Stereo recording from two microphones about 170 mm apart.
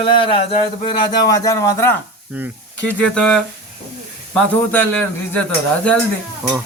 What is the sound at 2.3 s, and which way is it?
Speech, 10° right (ahead or behind).